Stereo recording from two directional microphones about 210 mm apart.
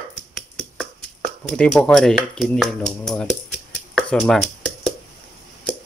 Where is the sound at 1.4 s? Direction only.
5° left (ahead or behind).